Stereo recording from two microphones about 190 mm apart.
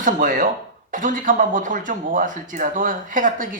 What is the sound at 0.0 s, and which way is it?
Speech, 45° right (ahead or behind).